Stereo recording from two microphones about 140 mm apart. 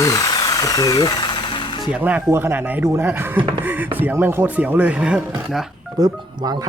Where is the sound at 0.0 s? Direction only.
25° left (ahead or behind).